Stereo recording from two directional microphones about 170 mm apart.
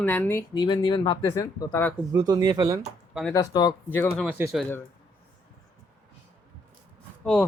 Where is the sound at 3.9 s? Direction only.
10° left (ahead or behind).